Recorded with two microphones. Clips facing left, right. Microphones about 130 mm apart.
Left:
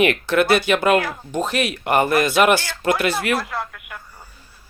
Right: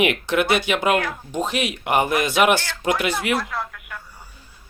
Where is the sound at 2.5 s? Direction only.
15° left (ahead or behind).